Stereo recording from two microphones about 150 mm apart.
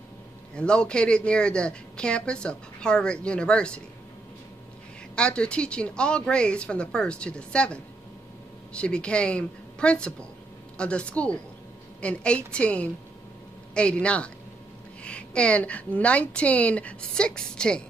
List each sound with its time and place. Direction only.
0.6 s a woman's voice: 5° left (ahead or behind)
5.1 s a woman's voice: 5° left (ahead or behind)